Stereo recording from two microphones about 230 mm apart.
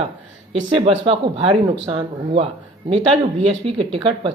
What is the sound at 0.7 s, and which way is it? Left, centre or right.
Speech, right.